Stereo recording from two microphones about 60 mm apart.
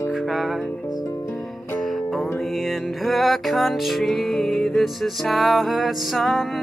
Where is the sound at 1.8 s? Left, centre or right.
Centre.